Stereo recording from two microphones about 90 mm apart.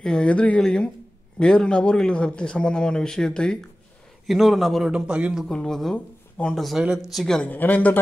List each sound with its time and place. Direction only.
0.0 s speech: 10° left (ahead or behind)
4.3 s a man's voice: centre (ahead or behind)
4.9 s a man's voice: 10° right (ahead or behind)
5.5 s speech: 5° left (ahead or behind)
6.8 s a man's voice: 5° right (ahead or behind)
7.4 s speech: 20° left (ahead or behind)